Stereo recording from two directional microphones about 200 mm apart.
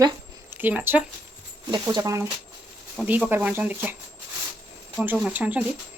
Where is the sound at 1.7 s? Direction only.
20° right (ahead or behind).